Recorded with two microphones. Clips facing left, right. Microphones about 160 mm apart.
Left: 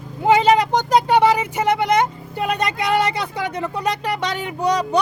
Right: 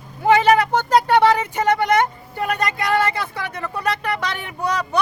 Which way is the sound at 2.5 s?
20° left (ahead or behind).